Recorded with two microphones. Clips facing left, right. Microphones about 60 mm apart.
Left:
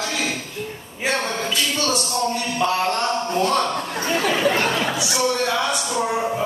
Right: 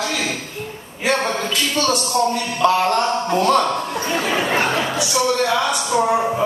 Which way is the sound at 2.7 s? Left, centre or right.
Right.